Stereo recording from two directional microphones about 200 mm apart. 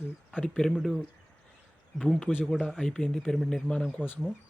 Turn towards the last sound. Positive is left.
turn(degrees=10)  # may be behind; listen again after turning